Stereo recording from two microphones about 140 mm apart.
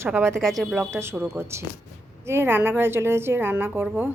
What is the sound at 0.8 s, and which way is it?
A woman's voice, 15° right (ahead or behind).